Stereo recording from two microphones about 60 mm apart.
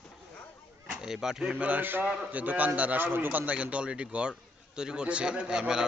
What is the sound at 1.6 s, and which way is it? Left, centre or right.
A man's voice, right.